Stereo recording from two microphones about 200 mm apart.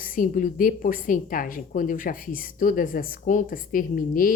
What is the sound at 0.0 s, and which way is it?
A woman's voice, 45° left (ahead or behind).